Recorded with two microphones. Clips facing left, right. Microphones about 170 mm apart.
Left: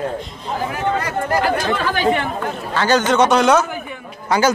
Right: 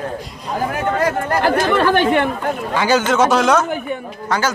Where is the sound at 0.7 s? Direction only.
50° right (ahead or behind).